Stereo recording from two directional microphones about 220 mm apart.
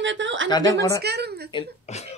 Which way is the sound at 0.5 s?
15° left (ahead or behind).